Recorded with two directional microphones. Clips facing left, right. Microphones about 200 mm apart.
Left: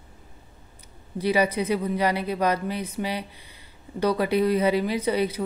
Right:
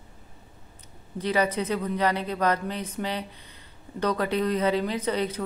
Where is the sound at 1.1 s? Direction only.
10° left (ahead or behind).